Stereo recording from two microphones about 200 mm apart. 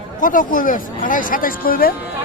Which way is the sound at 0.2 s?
40° left (ahead or behind).